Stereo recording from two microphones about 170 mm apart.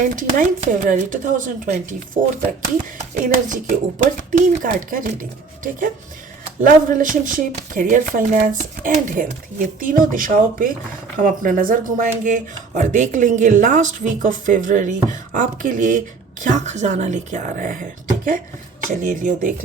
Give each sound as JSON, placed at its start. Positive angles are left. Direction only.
{"t": 0.0, "sound": "speech", "side_deg": -50}
{"t": 3.0, "sound": "speech", "side_deg": -50}
{"t": 6.6, "sound": "speech", "side_deg": -50}
{"t": 18.9, "sound": "speech", "side_deg": -50}